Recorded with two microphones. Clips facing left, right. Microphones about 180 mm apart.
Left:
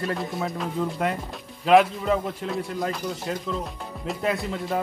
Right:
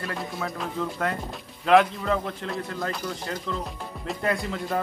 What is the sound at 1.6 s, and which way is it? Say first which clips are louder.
A man's voice: left 1 dB; 5° left (ahead or behind).